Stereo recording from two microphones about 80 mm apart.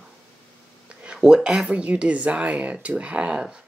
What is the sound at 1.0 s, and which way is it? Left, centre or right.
Speech, centre.